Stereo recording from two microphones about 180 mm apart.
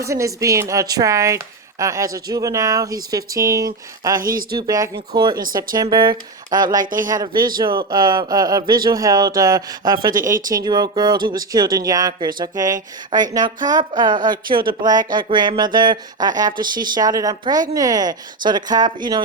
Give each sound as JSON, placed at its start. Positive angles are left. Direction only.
{"t": 0.0, "sound": "speech", "side_deg": -15}
{"t": 4.2, "sound": "speech", "side_deg": -50}
{"t": 4.5, "sound": "speech", "side_deg": -20}
{"t": 7.3, "sound": "speech", "side_deg": -50}
{"t": 7.6, "sound": "speech", "side_deg": -25}